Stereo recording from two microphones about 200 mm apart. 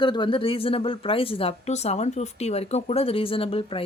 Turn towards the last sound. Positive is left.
turn(degrees=30)  # may be behind; listen again after turning